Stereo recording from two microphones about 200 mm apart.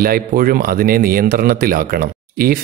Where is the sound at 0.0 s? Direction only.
45° right (ahead or behind).